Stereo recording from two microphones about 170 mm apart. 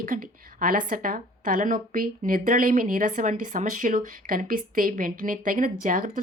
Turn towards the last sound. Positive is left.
turn(degrees=-55)  # may be behind; listen again after turning